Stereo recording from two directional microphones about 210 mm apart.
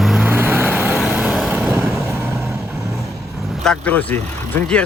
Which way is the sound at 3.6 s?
5° left (ahead or behind).